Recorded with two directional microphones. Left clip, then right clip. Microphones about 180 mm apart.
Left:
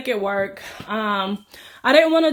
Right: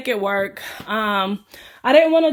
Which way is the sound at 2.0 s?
10° right (ahead or behind).